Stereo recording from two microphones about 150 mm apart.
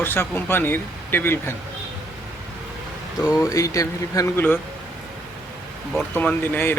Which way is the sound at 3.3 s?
20° left (ahead or behind).